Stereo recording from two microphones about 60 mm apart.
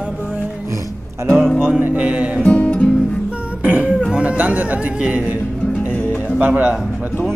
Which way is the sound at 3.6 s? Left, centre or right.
Right.